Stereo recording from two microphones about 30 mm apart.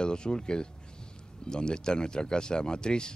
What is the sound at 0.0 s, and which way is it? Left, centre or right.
Speech, left.